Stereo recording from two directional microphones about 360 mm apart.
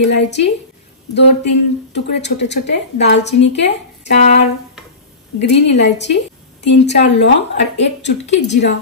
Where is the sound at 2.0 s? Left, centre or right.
Left.